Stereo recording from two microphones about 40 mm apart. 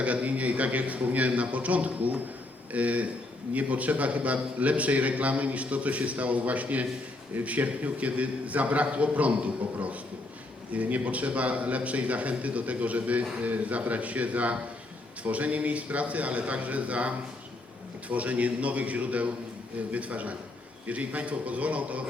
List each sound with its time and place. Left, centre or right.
0.0 s a man's voice: right